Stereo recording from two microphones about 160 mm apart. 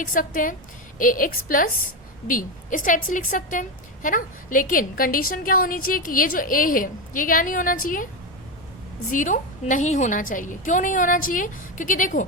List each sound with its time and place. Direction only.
0.0 s a woman's voice: 55° left (ahead or behind)
9.0 s a woman's voice: 55° left (ahead or behind)